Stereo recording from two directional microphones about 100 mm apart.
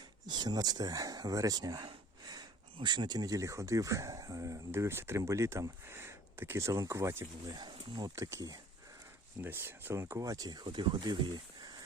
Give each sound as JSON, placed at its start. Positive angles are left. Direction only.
{"t": 0.3, "sound": "speech", "side_deg": -45}
{"t": 7.5, "sound": "speech", "side_deg": -45}
{"t": 8.1, "sound": "speech", "side_deg": -30}
{"t": 9.4, "sound": "speech", "side_deg": -20}